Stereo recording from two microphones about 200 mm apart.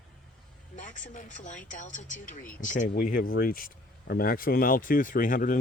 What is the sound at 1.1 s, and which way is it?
Speech, 40° left (ahead or behind).